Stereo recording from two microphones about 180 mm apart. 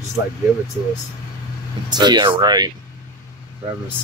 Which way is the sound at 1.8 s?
25° right (ahead or behind).